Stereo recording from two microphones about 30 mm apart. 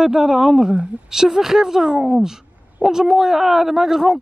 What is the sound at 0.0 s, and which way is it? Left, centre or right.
Speech, centre.